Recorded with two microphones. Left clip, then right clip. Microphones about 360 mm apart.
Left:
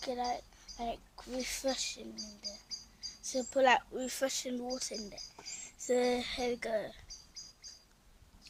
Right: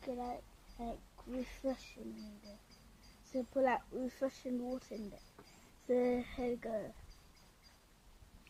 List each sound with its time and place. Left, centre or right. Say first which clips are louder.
0.0 s speech: left 7 dB; left
3.3 s speech: left 6 dB; left